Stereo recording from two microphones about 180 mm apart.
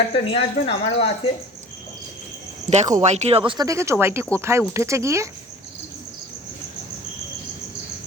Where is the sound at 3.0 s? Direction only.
40° right (ahead or behind).